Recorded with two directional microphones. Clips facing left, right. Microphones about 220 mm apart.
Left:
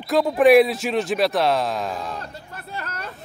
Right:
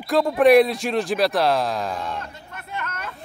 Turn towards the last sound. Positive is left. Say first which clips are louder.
# right 1 dB
turn(degrees=35)  # may be behind; listen again after turning